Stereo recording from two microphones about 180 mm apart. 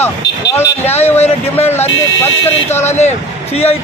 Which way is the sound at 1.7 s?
10° left (ahead or behind).